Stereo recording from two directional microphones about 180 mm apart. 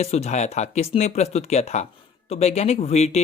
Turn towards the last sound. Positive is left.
turn(degrees=35)  # may be behind; listen again after turning